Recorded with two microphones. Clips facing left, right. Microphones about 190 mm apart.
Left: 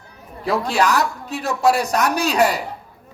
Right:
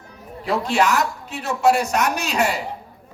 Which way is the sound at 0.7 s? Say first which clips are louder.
Even; 35° left (ahead or behind).